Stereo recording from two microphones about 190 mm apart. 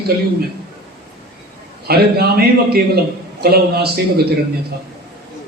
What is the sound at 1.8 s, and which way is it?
A man's voice, 55° right (ahead or behind).